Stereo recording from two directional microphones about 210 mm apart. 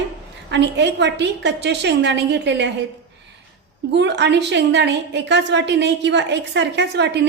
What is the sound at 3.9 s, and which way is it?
A woman's voice, 55° right (ahead or behind).